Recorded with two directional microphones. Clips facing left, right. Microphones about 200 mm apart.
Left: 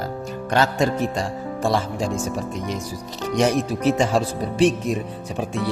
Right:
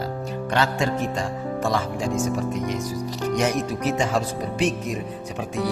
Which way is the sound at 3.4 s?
30° left (ahead or behind).